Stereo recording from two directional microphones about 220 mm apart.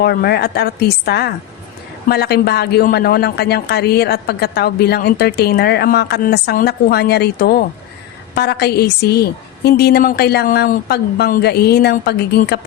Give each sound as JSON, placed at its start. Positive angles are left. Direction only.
{"t": 0.0, "sound": "speech", "side_deg": 45}